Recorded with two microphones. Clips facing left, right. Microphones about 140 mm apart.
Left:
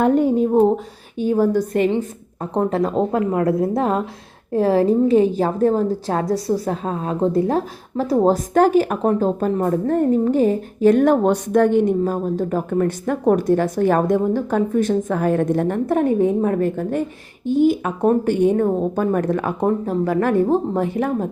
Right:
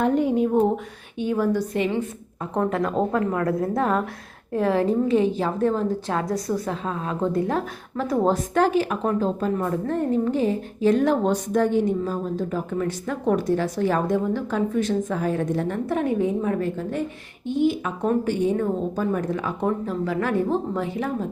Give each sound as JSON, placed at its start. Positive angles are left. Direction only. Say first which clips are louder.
{"t": 0.0, "sound": "a woman's voice", "louder": "left 4 dB", "side_deg": 45}
{"t": 2.6, "sound": "a woman's voice", "louder": "left 4 dB", "side_deg": 30}